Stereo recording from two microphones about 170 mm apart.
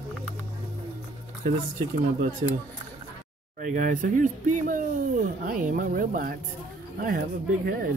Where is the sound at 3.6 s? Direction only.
50° right (ahead or behind).